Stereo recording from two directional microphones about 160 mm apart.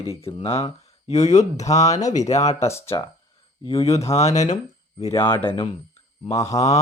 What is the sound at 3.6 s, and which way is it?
Speech, 40° left (ahead or behind).